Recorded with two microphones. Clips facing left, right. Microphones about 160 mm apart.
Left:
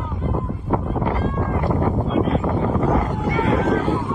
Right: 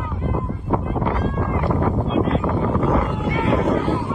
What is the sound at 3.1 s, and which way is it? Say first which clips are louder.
Vehicle: even; 20° right (ahead or behind).